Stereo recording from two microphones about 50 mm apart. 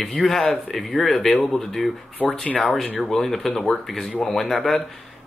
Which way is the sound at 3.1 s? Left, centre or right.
Centre.